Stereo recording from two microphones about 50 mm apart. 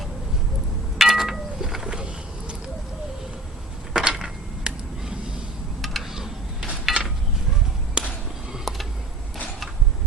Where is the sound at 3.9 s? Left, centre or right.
Centre.